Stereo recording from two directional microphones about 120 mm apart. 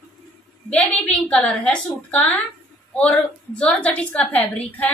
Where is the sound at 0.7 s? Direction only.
10° left (ahead or behind).